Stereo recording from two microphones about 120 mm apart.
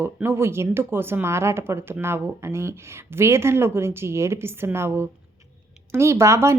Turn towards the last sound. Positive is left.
turn(degrees=-25)  # may be behind; listen again after turning